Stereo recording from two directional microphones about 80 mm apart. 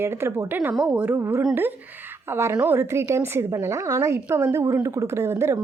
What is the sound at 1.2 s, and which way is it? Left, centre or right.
A woman's voice, right.